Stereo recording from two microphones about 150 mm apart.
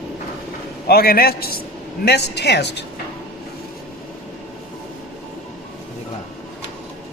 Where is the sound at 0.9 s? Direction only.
90° left.